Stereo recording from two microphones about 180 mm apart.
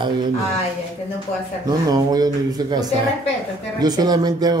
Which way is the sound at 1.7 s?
20° right (ahead or behind).